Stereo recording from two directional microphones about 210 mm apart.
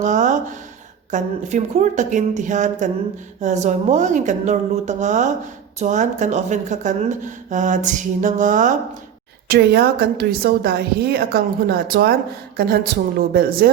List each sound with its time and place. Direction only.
0.0 s a sound: 35° right (ahead or behind)
1.1 s speech: 35° right (ahead or behind)
9.5 s a woman's voice: 50° right (ahead or behind)